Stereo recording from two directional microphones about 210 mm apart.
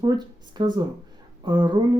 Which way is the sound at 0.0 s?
20° right (ahead or behind).